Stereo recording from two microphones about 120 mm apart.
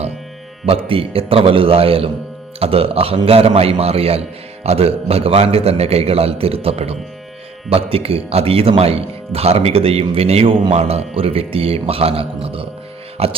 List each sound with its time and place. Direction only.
0.6 s a man's voice: 50° right (ahead or behind)